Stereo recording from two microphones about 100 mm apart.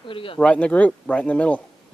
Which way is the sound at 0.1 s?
60° left (ahead or behind).